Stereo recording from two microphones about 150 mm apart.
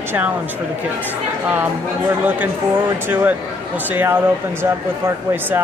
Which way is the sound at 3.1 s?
10° right (ahead or behind).